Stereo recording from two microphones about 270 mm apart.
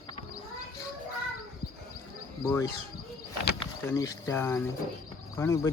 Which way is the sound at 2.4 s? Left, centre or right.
Centre.